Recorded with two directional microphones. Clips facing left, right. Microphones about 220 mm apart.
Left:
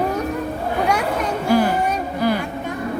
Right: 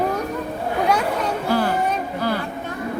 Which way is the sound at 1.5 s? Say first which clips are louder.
Left 4 dB; 15° left (ahead or behind).